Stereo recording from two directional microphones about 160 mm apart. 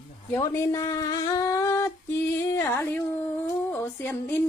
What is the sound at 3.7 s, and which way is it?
Female singing, 15° left (ahead or behind).